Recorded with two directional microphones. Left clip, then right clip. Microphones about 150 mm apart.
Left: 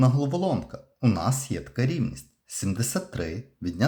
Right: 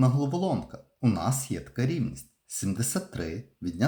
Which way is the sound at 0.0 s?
25° left (ahead or behind).